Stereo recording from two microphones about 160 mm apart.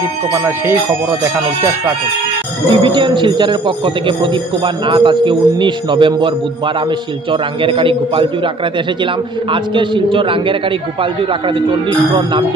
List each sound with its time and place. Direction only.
2.7 s speech: 30° right (ahead or behind)
7.6 s a man's voice: 35° right (ahead or behind)
9.5 s a man's voice: 30° right (ahead or behind)